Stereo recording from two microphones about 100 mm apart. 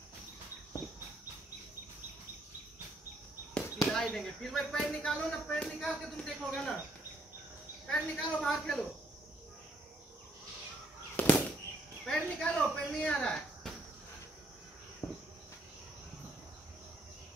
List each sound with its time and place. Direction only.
3.9 s speech: 5° left (ahead or behind)
7.8 s speech: 5° left (ahead or behind)
11.1 s fireworks: 10° left (ahead or behind)
12.1 s speech: 10° left (ahead or behind)
15.0 s cricket: 30° left (ahead or behind)